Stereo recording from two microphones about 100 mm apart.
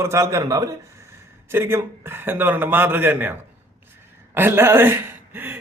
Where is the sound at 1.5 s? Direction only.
25° right (ahead or behind).